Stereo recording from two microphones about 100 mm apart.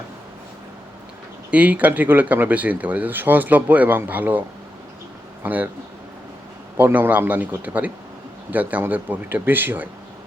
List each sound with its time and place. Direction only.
1.5 s speech: 15° right (ahead or behind)
6.7 s speech: 20° right (ahead or behind)